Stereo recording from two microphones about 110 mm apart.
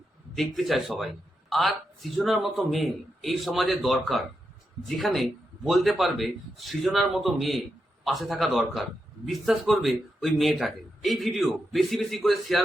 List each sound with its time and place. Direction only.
0.3 s speech: centre (ahead or behind)